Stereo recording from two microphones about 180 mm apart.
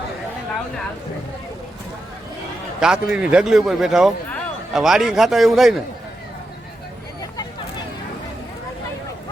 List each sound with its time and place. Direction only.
2.8 s a man's voice: 5° right (ahead or behind)